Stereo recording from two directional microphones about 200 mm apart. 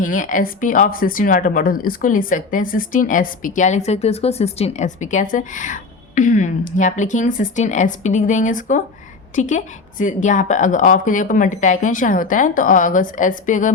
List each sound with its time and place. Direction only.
0.0 s speech: 40° left (ahead or behind)